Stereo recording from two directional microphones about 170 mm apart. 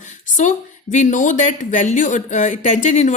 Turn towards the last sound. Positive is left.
turn(degrees=45)  # may be behind; listen again after turning